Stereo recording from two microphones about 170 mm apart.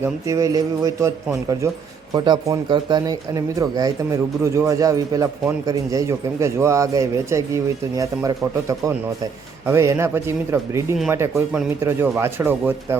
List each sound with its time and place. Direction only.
0.0 s speech: 20° right (ahead or behind)